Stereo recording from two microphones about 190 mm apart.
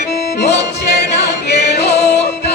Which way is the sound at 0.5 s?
60° left (ahead or behind).